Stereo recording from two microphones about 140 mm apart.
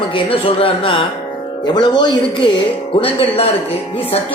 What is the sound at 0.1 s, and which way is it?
A man's voice, 40° left (ahead or behind).